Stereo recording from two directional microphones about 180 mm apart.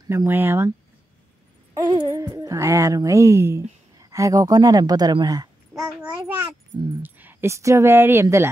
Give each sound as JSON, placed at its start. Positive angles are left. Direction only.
{"t": 0.0, "sound": "speech", "side_deg": -15}
{"t": 5.7, "sound": "a sound", "side_deg": -5}
{"t": 7.0, "sound": "speech", "side_deg": -10}